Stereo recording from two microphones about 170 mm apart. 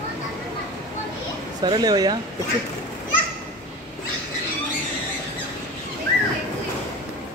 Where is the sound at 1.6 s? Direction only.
25° right (ahead or behind).